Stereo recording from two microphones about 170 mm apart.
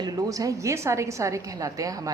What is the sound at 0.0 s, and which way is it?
A woman's voice, 20° right (ahead or behind).